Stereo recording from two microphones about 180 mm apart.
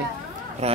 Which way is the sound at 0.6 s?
35° right (ahead or behind).